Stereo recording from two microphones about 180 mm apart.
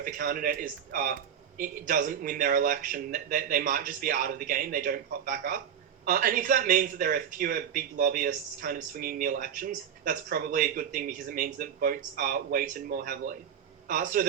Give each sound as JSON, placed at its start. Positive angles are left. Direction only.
{"t": 0.0, "sound": "speech", "side_deg": -50}